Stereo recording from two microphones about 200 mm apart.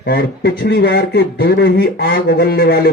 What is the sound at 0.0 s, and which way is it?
Speech, 60° left (ahead or behind).